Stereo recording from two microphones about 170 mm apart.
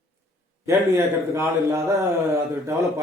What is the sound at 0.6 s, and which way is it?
A man's voice, 15° right (ahead or behind).